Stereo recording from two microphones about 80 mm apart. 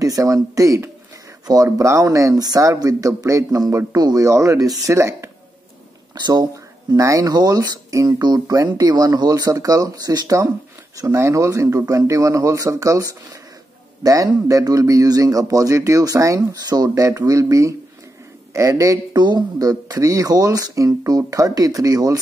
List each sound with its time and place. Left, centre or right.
0.0 s speech: right
6.1 s speech: right
7.0 s speech: right
19.1 s speech: right